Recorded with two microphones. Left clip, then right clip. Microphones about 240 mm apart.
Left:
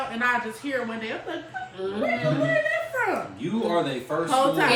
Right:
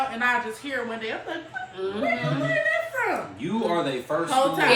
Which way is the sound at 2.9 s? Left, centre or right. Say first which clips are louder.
Left 1 dB; centre.